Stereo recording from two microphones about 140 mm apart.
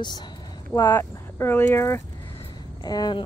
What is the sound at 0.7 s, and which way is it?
A woman's voice, 15° left (ahead or behind).